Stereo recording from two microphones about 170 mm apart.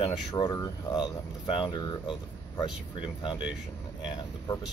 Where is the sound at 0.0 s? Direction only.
25° left (ahead or behind).